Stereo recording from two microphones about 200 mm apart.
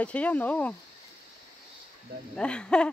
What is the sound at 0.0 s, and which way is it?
Speech, 5° left (ahead or behind).